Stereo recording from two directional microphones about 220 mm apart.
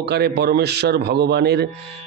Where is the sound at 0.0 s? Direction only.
50° right (ahead or behind).